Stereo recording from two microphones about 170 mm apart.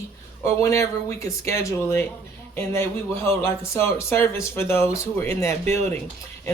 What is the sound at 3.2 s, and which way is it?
Speech, 15° left (ahead or behind).